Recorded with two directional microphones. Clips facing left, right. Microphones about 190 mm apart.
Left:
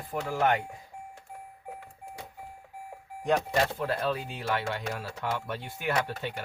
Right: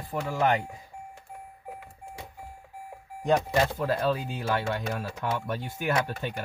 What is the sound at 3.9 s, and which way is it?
Speech, 40° right (ahead or behind).